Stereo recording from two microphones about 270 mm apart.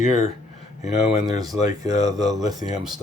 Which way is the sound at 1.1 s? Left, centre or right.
Centre.